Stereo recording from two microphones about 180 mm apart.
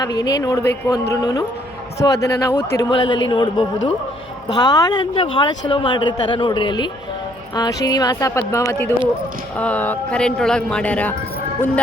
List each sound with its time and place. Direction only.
0.0 s speech: 20° left (ahead or behind)
2.9 s speech: 25° left (ahead or behind); by 11.1 s 5° left (ahead or behind)